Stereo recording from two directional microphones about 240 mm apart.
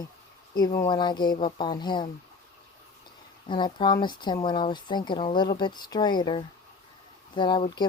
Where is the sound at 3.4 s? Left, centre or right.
Centre.